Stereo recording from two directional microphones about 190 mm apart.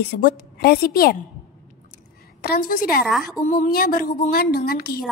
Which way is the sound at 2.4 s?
50° left (ahead or behind).